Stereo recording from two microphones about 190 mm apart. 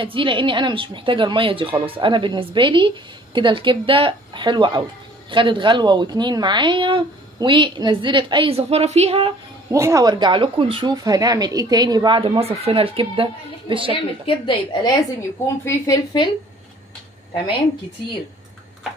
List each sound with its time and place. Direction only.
0.0 s speech: 25° right (ahead or behind)
9.7 s speech: 15° right (ahead or behind)
13.9 s a woman's voice: 25° left (ahead or behind)